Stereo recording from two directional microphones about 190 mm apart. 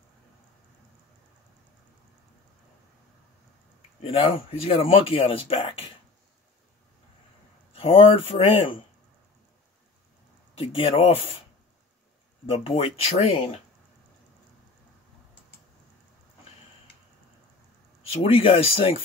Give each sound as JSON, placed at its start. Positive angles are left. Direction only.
{"t": 4.0, "sound": "speech", "side_deg": 30}
{"t": 7.7, "sound": "speech", "side_deg": 30}
{"t": 10.6, "sound": "speech", "side_deg": 30}
{"t": 12.4, "sound": "speech", "side_deg": 30}
{"t": 18.0, "sound": "speech", "side_deg": 30}